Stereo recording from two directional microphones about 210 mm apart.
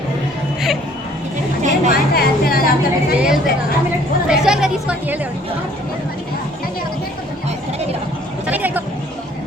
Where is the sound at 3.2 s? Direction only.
5° right (ahead or behind).